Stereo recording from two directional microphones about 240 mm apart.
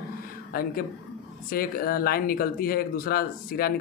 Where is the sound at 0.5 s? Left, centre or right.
Left.